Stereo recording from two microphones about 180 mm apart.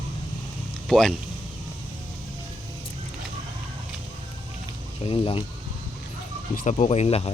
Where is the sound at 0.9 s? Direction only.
Centre (ahead or behind).